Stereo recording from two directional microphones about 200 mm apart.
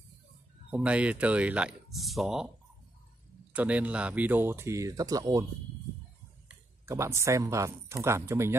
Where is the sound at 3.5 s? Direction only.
5° right (ahead or behind).